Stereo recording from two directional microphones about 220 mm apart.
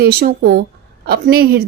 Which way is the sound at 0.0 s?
45° right (ahead or behind).